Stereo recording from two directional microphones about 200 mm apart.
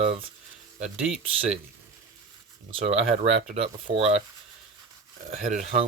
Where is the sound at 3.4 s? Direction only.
30° right (ahead or behind).